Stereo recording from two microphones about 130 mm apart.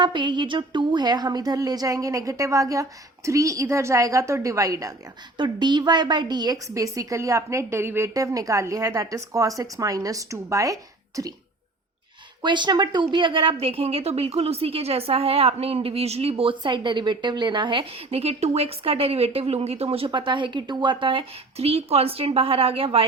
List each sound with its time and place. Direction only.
0.0 s a woman's voice: 35° right (ahead or behind)
12.4 s a woman's voice: 35° right (ahead or behind)
20.1 s a woman's voice: 40° right (ahead or behind)